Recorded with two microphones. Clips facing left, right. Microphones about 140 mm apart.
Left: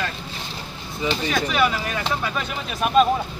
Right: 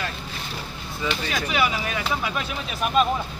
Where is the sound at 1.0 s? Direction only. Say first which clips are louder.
Left 3 dB; 20° left (ahead or behind).